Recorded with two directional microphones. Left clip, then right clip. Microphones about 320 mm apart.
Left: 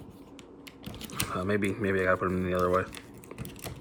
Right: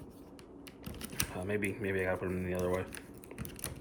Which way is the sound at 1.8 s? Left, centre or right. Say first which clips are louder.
Left 7 dB; left.